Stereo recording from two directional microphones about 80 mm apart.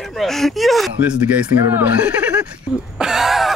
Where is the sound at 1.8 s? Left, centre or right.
Centre.